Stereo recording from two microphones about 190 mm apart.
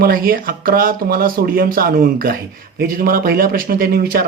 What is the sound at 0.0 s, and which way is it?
Speech, 50° right (ahead or behind).